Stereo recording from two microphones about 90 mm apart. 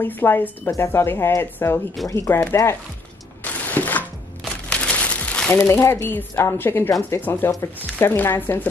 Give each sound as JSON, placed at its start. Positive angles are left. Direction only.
{"t": 0.0, "sound": "speech", "side_deg": 25}
{"t": 3.4, "sound": "a sound", "side_deg": 20}
{"t": 4.6, "sound": "crumpling", "side_deg": 15}
{"t": 5.7, "sound": "speech", "side_deg": 30}